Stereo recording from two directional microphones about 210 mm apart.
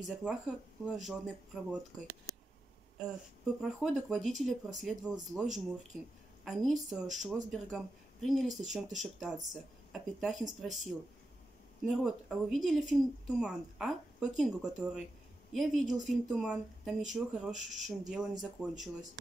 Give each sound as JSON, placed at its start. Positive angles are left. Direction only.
{"t": 0.0, "sound": "speech", "side_deg": -5}
{"t": 2.3, "sound": "a sound", "side_deg": 15}
{"t": 3.6, "sound": "speech", "side_deg": 0}